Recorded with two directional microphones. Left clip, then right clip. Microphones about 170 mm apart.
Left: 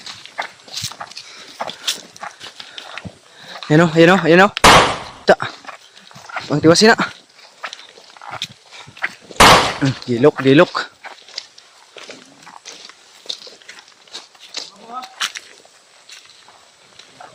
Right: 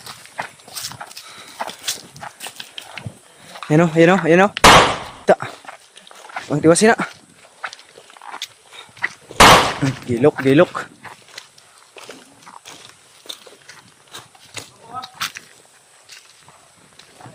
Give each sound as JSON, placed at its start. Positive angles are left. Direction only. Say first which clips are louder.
{"t": 1.0, "sound": "horse", "louder": "left 3 dB", "side_deg": 15}
{"t": 2.1, "sound": "clip-clop", "louder": "left 1 dB", "side_deg": 20}
{"t": 3.7, "sound": "speech", "louder": "left 2 dB", "side_deg": 15}
{"t": 4.6, "sound": "firecracker", "louder": "even", "side_deg": 0}
{"t": 5.3, "sound": "dog", "louder": "left 2 dB", "side_deg": 15}
{"t": 6.5, "sound": "speech", "louder": "left 2 dB", "side_deg": 10}
{"t": 8.2, "sound": "walk", "louder": "left 3 dB", "side_deg": 40}
{"t": 9.0, "sound": "a sound", "louder": "even", "side_deg": 50}
{"t": 9.4, "sound": "a sound", "louder": "even", "side_deg": 0}
{"t": 9.9, "sound": "speech", "louder": "left 4 dB", "side_deg": 10}
{"t": 11.4, "sound": "a sound", "louder": "left 9 dB", "side_deg": -60}
{"t": 14.1, "sound": "a sound", "louder": "left 4 dB", "side_deg": -55}